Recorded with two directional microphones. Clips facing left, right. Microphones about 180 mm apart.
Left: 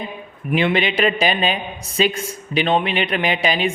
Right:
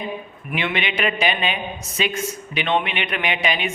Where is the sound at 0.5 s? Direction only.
35° left (ahead or behind).